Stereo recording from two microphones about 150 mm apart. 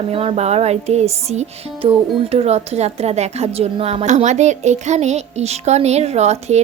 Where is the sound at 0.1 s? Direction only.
40° right (ahead or behind).